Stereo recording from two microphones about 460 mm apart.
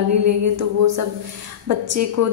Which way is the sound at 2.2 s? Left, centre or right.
Right.